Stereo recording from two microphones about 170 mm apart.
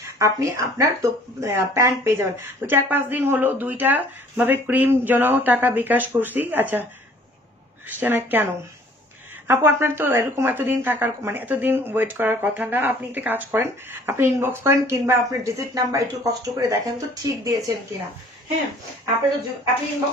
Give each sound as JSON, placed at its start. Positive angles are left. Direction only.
{"t": 0.2, "sound": "speech", "side_deg": -20}
{"t": 9.5, "sound": "speech", "side_deg": -15}